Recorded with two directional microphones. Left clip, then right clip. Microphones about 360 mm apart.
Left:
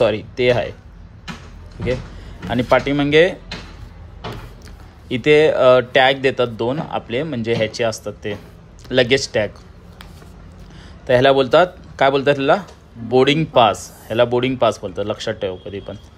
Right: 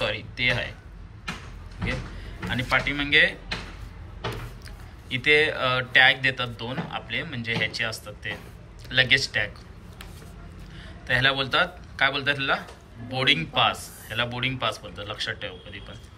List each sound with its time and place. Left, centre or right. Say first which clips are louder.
0.0 s speech: left 9 dB; centre
2.5 s speech: left 8 dB; centre
5.0 s speech: left 7 dB; centre
11.1 s speech: left 10 dB; centre